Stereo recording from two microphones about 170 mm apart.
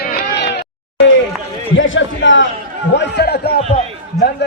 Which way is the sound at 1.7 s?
90° left.